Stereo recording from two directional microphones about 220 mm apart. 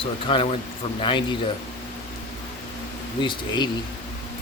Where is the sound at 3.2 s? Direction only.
20° left (ahead or behind).